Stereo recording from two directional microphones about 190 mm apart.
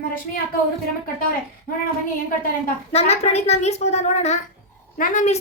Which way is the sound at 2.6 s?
35° left (ahead or behind).